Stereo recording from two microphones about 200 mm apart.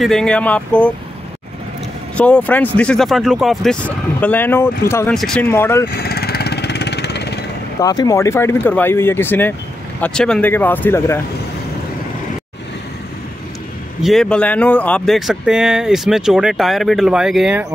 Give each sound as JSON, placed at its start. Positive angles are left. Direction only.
{"t": 0.0, "sound": "speech", "side_deg": 5}
{"t": 2.1, "sound": "speech", "side_deg": 5}
{"t": 5.9, "sound": "vehicle", "side_deg": 50}
{"t": 7.8, "sound": "speech", "side_deg": 20}
{"t": 14.0, "sound": "speech", "side_deg": 5}